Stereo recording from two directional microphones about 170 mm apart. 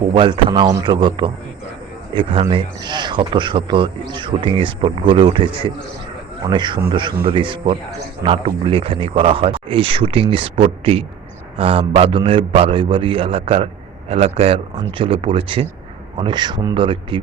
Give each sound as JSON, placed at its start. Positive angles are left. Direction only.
{"t": 0.1, "sound": "a man's voice", "side_deg": -30}